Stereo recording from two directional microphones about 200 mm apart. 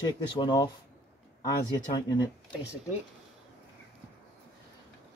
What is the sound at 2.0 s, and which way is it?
Speech, 20° left (ahead or behind).